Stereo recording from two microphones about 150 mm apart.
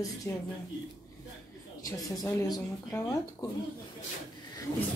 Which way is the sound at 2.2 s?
20° left (ahead or behind).